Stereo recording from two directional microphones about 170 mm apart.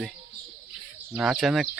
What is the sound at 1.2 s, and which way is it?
Speech, centre (ahead or behind).